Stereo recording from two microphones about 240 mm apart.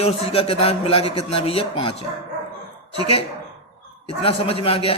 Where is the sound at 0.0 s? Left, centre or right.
Left.